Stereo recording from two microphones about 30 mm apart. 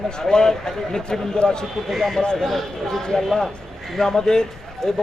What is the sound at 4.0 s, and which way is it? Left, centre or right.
Speech, centre.